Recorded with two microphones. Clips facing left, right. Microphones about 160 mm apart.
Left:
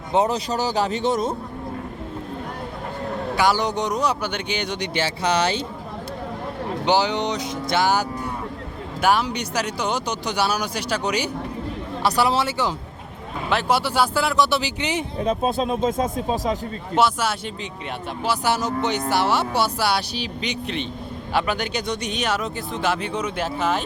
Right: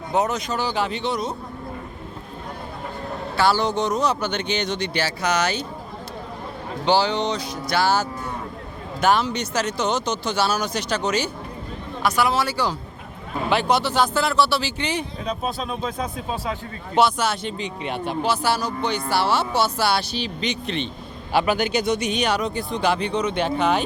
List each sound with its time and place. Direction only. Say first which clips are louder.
0.1 s speech: left 2 dB; 30° left (ahead or behind); by 1.3 s 45° left (ahead or behind)
3.3 s speech: right 1 dB; 15° left (ahead or behind)
4.9 s speech: left 2 dB; 25° left (ahead or behind)
6.8 s speech: right 1 dB; 15° left (ahead or behind)
12.0 s speech: left 1 dB; 30° left (ahead or behind)
13.5 s speech: right 1 dB; 5° left (ahead or behind)
15.4 s speech: left 5 dB; 30° left (ahead or behind)
15.9 s speech: left 5 dB; 45° left (ahead or behind)
16.9 s speech: right 1 dB; 5° left (ahead or behind)
18.4 s speech: left 1 dB; 20° left (ahead or behind)
21.3 s speech: right 4 dB; 5° right (ahead or behind)